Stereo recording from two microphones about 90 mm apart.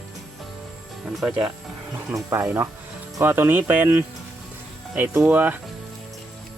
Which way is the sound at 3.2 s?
20° right (ahead or behind).